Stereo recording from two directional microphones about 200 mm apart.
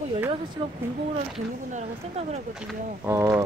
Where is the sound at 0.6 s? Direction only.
25° right (ahead or behind).